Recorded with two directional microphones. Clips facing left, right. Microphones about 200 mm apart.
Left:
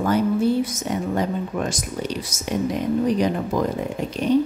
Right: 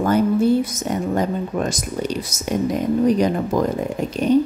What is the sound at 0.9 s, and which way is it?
Speech, 45° right (ahead or behind).